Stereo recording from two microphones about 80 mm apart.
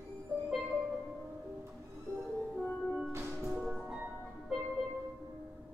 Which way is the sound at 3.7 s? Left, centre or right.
Centre.